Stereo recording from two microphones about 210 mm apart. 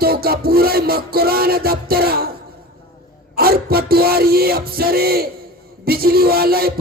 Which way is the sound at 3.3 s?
45° right (ahead or behind).